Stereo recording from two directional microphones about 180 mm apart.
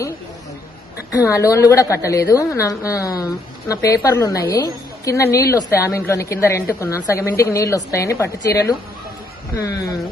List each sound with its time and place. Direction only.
1.1 s a woman's voice: 15° left (ahead or behind)